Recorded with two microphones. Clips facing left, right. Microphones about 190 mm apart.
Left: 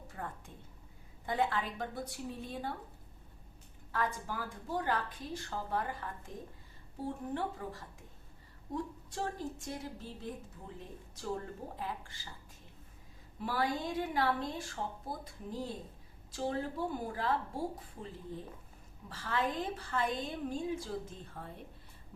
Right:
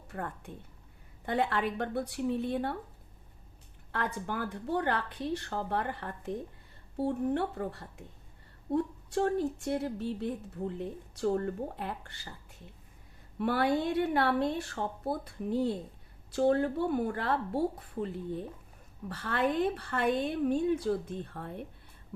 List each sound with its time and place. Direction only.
0.1 s a woman's voice: 65° right (ahead or behind)
3.9 s a woman's voice: 65° right (ahead or behind)
13.4 s a woman's voice: 65° right (ahead or behind)